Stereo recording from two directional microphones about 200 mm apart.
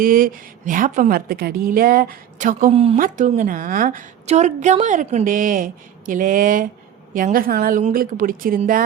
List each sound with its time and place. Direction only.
0.0 s a woman's voice: 45° right (ahead or behind)
2.7 s a woman's voice: 30° right (ahead or behind)